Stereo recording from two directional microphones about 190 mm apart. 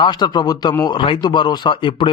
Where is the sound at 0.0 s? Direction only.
20° left (ahead or behind).